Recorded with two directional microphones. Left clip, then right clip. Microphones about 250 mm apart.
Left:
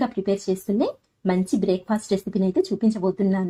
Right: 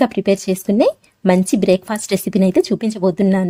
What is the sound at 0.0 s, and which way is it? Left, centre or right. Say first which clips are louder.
Speech: right 8 dB; right.